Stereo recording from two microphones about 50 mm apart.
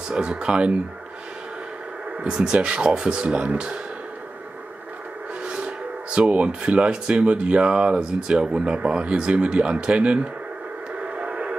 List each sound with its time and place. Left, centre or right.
0.1 s speech: centre
2.1 s speech: centre
5.4 s music: centre
6.1 s speech: centre
11.1 s radio: right